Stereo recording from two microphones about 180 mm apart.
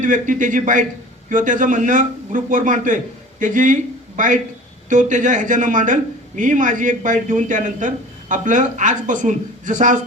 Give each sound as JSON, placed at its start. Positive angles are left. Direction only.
{"t": 0.0, "sound": "a man's voice", "side_deg": -45}